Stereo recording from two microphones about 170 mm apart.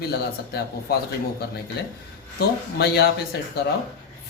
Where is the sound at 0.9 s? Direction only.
65° left (ahead or behind).